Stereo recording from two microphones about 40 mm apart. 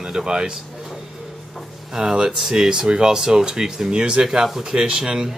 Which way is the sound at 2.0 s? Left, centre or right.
Centre.